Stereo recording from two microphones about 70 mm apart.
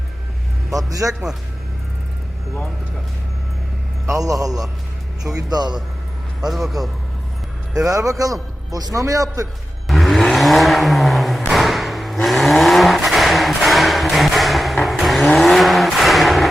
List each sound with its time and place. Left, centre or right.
0.7 s a man's voice: right
4.2 s a man's voice: right
5.4 s a man's voice: right
6.4 s a man's voice: centre
7.9 s a man's voice: right
9.8 s a sound: centre
14.8 s vehicle: centre